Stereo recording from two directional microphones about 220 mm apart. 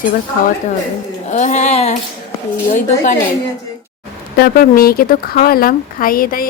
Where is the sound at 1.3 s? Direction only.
35° left (ahead or behind).